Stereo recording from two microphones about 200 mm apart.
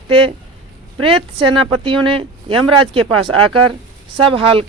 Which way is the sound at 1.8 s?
25° right (ahead or behind).